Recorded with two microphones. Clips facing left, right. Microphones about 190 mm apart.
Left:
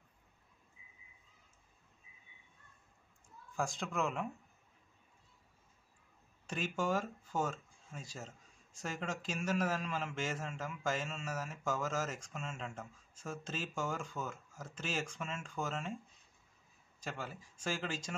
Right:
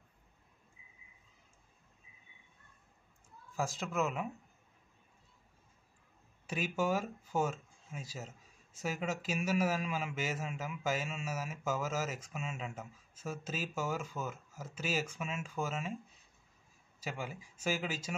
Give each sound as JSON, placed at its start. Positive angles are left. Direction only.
{"t": 3.5, "sound": "speech", "side_deg": 0}
{"t": 6.4, "sound": "a man's voice", "side_deg": -5}
{"t": 17.0, "sound": "a man's voice", "side_deg": -10}